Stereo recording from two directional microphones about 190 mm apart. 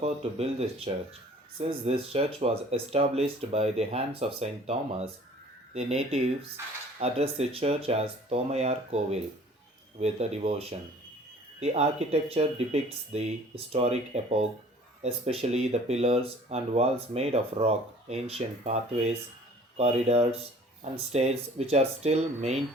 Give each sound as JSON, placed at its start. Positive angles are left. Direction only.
{"t": 0.9, "sound": "speech", "side_deg": -30}